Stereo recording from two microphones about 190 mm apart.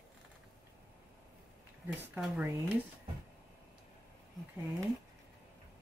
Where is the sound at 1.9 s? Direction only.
5° right (ahead or behind).